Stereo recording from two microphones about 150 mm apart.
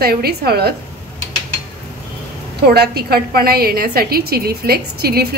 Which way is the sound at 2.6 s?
90° right.